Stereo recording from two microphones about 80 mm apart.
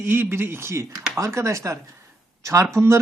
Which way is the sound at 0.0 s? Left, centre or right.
Right.